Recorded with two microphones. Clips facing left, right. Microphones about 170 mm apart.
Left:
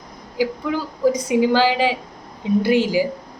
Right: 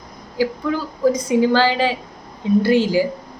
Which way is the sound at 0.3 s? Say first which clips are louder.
Right 1 dB; 15° left (ahead or behind).